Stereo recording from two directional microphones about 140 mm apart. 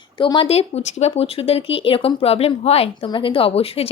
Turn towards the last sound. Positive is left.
turn(degrees=45)  # may be behind; listen again after turning